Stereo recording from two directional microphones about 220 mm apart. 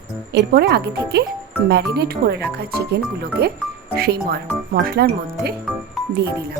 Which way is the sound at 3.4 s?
45° right (ahead or behind).